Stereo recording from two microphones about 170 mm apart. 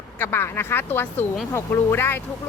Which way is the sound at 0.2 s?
15° left (ahead or behind).